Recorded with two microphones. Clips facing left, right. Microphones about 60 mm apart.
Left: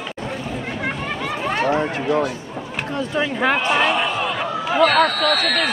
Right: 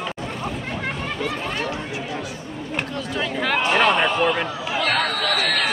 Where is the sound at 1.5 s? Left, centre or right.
Left.